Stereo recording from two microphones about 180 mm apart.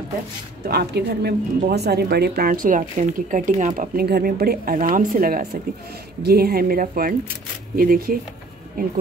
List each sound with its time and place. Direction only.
0.7 s speech: 60° right (ahead or behind)